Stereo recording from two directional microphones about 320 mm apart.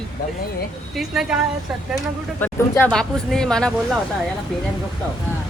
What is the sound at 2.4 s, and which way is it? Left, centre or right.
A woman's voice, centre.